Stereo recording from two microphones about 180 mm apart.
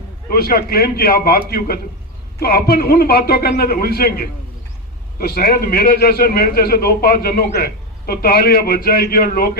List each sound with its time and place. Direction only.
0.3 s a man's voice: 55° left (ahead or behind)